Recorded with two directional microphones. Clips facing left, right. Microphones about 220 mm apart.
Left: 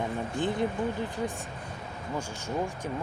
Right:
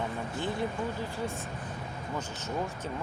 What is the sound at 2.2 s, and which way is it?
Speech, 10° left (ahead or behind).